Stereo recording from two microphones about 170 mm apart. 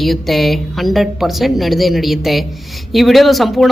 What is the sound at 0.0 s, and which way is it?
Speech, centre (ahead or behind).